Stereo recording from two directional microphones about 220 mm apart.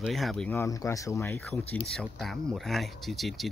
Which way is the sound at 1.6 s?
25° left (ahead or behind).